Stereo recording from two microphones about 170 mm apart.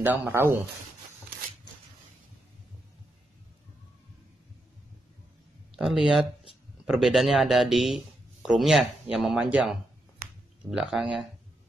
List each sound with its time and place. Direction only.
0.0 s speech: 10° right (ahead or behind)
5.9 s speech: 5° right (ahead or behind)
10.2 s a sound: 60° right (ahead or behind)
10.7 s speech: 5° right (ahead or behind)